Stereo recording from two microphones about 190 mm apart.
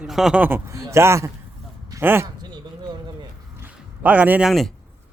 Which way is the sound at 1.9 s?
15° right (ahead or behind).